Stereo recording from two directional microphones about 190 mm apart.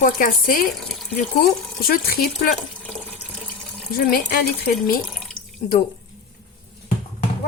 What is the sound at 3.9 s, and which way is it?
Speech, 50° left (ahead or behind).